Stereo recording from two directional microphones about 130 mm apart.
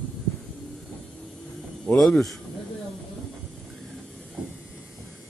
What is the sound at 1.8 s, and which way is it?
Speech, 5° left (ahead or behind).